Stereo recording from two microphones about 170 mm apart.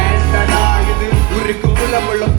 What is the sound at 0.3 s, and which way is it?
Music, 55° left (ahead or behind).